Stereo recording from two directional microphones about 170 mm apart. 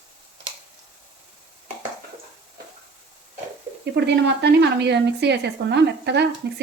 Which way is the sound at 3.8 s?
90° right.